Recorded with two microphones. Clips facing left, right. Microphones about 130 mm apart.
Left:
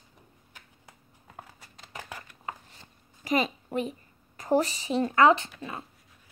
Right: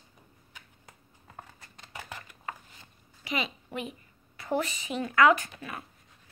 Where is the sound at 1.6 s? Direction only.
5° left (ahead or behind).